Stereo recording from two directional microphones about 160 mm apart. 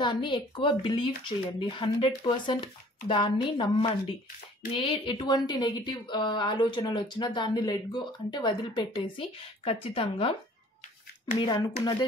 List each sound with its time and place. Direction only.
0.0 s speech: 30° left (ahead or behind)
11.3 s speech: 30° left (ahead or behind)